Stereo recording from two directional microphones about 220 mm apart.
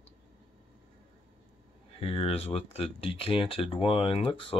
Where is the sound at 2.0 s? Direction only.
25° left (ahead or behind).